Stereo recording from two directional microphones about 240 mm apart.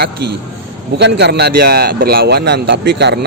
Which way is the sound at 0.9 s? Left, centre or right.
Right.